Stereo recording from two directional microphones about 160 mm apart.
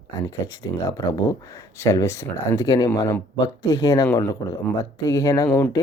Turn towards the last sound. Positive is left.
turn(degrees=20)  # may be behind; listen again after turning